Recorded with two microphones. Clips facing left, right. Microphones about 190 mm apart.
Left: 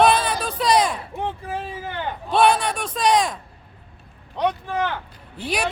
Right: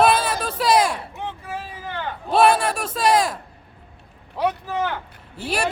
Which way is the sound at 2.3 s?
5° right (ahead or behind).